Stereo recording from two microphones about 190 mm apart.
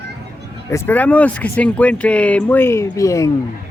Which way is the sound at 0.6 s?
15° left (ahead or behind).